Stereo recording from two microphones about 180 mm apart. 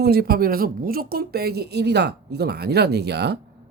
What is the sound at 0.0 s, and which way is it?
A woman's voice, 60° right (ahead or behind).